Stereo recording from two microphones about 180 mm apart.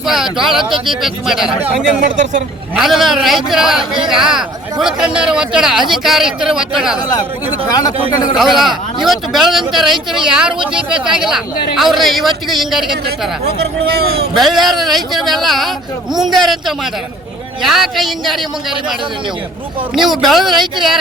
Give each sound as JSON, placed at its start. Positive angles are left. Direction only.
{"t": 0.0, "sound": "speech", "side_deg": -5}
{"t": 2.0, "sound": "speech", "side_deg": -45}
{"t": 2.7, "sound": "speech", "side_deg": 0}
{"t": 7.7, "sound": "speech", "side_deg": 20}
{"t": 8.4, "sound": "speech", "side_deg": 0}
{"t": 13.9, "sound": "a man's voice", "side_deg": -60}
{"t": 14.3, "sound": "speech", "side_deg": 0}